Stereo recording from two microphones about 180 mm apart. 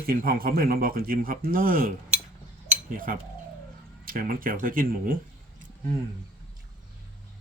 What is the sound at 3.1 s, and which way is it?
Speech, 50° right (ahead or behind).